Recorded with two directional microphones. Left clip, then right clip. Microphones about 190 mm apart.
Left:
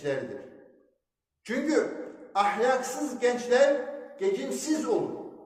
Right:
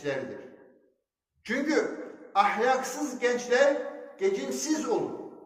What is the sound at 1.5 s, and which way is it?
A man's voice, 15° left (ahead or behind).